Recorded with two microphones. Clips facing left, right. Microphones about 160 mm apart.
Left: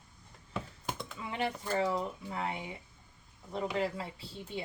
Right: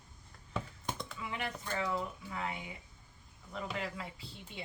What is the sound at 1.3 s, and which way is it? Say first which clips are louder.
Speech: left 7 dB; 35° left (ahead or behind).